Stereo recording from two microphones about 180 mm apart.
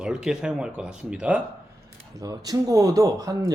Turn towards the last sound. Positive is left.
turn(degrees=-20)  # may be behind; listen again after turning